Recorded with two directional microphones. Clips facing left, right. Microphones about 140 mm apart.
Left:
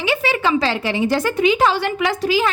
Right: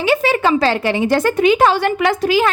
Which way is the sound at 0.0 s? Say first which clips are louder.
Right 4 dB; 45° right (ahead or behind).